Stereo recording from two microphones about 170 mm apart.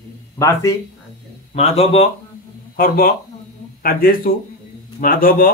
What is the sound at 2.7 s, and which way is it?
Speech, 60° left (ahead or behind).